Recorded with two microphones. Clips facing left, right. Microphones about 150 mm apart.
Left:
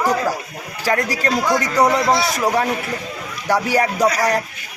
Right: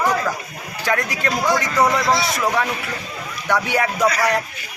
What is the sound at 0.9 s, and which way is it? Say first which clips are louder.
Speech: left 2 dB; 35° left (ahead or behind).